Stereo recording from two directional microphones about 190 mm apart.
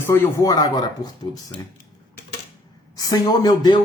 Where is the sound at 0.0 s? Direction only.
15° left (ahead or behind).